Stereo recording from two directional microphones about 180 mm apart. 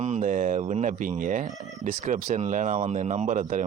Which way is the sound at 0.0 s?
40° right (ahead or behind).